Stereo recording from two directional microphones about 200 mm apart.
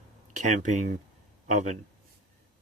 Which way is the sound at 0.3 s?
40° right (ahead or behind).